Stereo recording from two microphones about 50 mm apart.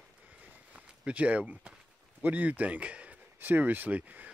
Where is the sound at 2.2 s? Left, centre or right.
Right.